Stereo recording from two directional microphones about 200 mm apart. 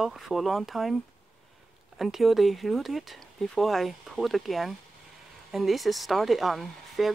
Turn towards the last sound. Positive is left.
turn(degrees=0)  # may be behind; listen again after turning